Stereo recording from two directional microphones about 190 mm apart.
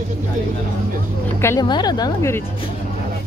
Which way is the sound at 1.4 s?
15° left (ahead or behind).